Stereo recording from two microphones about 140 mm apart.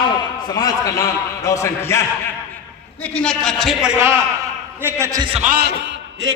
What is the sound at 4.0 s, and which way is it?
A man's voice, 20° right (ahead or behind).